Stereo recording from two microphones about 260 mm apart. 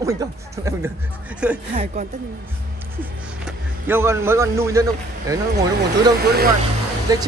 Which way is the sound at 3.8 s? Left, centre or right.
Centre.